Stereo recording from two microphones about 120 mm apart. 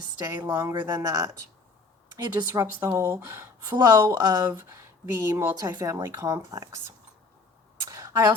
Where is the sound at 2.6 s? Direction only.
15° right (ahead or behind).